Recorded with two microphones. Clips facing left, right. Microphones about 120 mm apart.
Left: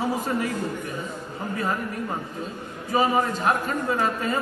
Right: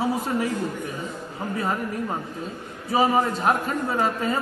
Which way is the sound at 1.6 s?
5° right (ahead or behind).